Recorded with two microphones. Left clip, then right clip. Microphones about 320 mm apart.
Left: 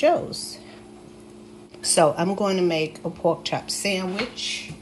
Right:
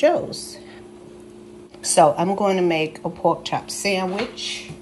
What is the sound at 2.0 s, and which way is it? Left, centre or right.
Speech, centre.